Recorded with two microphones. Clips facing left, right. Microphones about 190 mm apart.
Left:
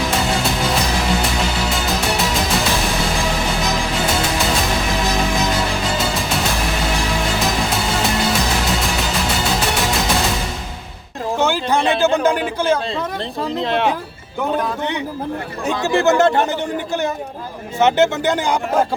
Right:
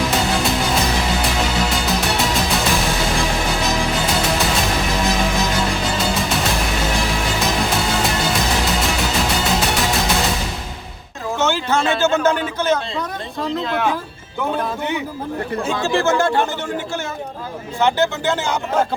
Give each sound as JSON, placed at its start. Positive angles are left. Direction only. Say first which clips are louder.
{"t": 11.3, "sound": "a sound", "louder": "left 1 dB", "side_deg": 15}
{"t": 13.7, "sound": "speech", "louder": "left 4 dB", "side_deg": 25}
{"t": 15.8, "sound": "speech", "louder": "left 4 dB", "side_deg": 20}
{"t": 17.7, "sound": "speech", "louder": "left 3 dB", "side_deg": 20}